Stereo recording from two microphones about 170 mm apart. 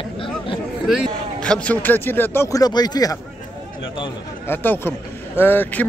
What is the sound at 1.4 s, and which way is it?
Speech, 10° left (ahead or behind).